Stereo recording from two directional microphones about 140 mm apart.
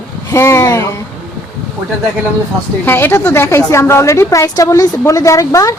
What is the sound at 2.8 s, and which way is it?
A woman's voice, 15° left (ahead or behind).